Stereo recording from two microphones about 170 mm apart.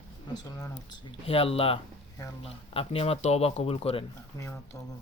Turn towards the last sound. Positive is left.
turn(degrees=20)  # may be behind; listen again after turning